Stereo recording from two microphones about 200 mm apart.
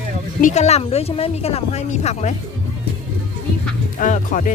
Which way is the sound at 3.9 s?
40° left (ahead or behind).